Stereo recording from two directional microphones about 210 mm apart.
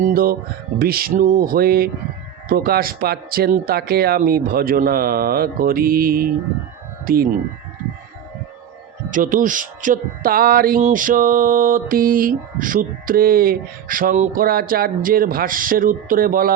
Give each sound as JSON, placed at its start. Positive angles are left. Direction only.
{"t": 0.0, "sound": "speech", "side_deg": -45}
{"t": 9.0, "sound": "music", "side_deg": -40}